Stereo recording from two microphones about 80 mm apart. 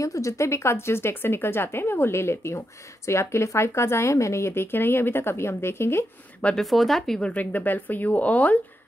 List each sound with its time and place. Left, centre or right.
0.0 s a woman's voice: left
6.4 s speech: centre